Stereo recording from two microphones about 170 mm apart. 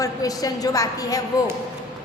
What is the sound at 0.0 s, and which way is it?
A woman's voice, 20° left (ahead or behind).